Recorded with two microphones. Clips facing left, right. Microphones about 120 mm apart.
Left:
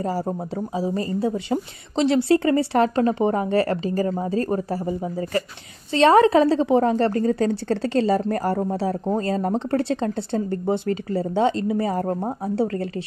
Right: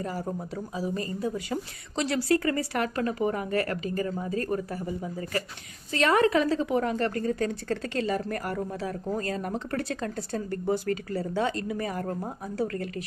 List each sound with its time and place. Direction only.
0.0 s speech: 30° left (ahead or behind)